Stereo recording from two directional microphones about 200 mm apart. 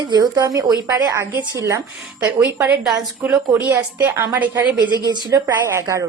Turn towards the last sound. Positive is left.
turn(degrees=-15)  # may be behind; listen again after turning